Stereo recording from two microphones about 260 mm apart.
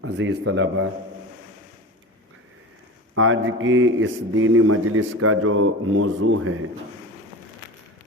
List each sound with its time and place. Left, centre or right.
0.0 s a man's voice: right
3.2 s a man's voice: right